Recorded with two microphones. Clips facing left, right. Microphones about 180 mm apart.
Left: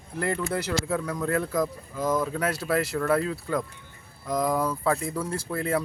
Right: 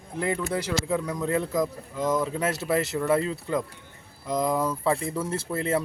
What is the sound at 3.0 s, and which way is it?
Speech, 20° right (ahead or behind).